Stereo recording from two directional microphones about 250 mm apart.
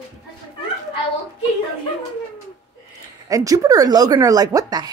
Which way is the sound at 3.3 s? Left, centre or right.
Centre.